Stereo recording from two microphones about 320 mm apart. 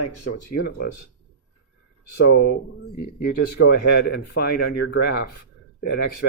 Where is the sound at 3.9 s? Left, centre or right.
Left.